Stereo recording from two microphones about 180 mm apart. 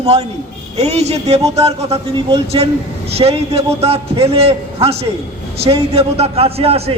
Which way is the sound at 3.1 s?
35° right (ahead or behind).